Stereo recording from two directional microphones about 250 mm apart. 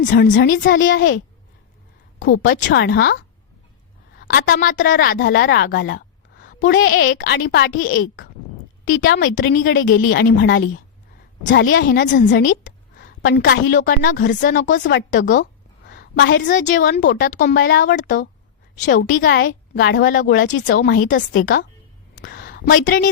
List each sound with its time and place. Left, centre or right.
0.0 s a woman's voice: left
2.5 s a woman's voice: left
4.2 s a woman's voice: left
6.7 s a woman's voice: left
17.9 s a woman's voice: left
19.2 s a woman's voice: left
22.2 s a sound: left